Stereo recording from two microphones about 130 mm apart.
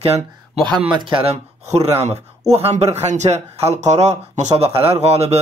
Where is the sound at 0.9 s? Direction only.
40° right (ahead or behind).